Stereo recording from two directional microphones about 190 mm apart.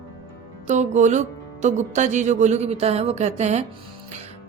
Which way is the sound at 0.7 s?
40° right (ahead or behind).